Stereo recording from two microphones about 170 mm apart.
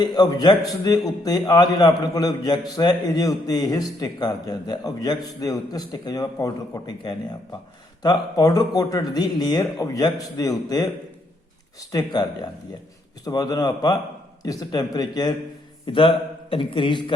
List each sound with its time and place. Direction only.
0.0 s a man's voice: 25° left (ahead or behind)
11.9 s a man's voice: 25° left (ahead or behind)